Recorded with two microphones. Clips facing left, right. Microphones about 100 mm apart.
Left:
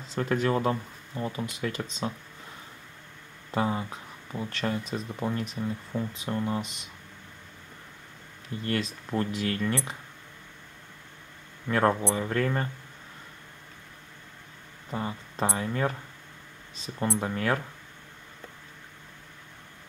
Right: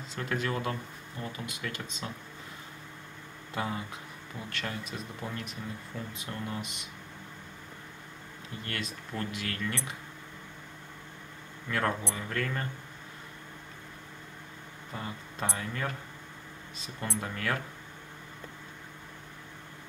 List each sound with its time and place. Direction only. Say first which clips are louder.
0.1 s speech: left 7 dB; 35° left (ahead or behind)
3.5 s speech: left 6 dB; 30° left (ahead or behind)
8.6 s speech: left 9 dB; 30° left (ahead or behind)
11.7 s speech: left 7 dB; 30° left (ahead or behind)
14.9 s speech: left 7 dB; 25° left (ahead or behind)